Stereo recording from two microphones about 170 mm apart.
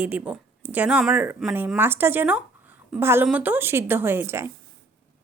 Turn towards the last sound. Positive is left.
turn(degrees=-15)  # may be behind; listen again after turning